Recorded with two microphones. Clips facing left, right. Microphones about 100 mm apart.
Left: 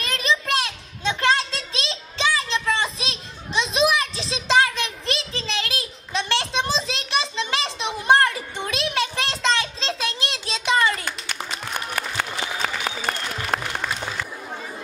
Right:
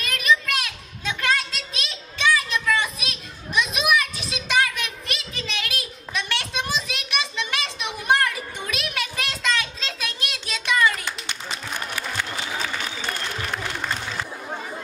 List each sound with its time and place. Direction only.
0.0 s children playing: 30° left (ahead or behind)
11.9 s applause: 55° left (ahead or behind)
13.5 s applause: 75° left (ahead or behind)